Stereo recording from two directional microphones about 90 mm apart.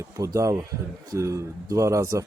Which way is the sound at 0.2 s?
35° right (ahead or behind).